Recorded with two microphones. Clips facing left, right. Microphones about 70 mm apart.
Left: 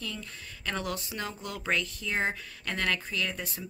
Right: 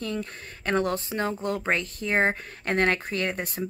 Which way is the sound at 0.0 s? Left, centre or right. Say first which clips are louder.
Right 8 dB; right.